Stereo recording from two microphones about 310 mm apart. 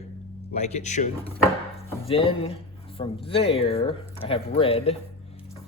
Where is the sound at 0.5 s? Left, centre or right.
Left.